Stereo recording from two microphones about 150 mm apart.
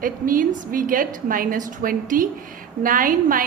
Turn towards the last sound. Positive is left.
turn(degrees=-65)  # may be behind; listen again after turning